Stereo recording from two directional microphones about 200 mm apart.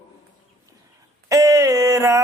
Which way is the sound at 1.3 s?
15° right (ahead or behind).